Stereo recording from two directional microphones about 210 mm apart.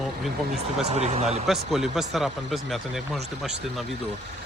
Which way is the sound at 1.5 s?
Centre (ahead or behind).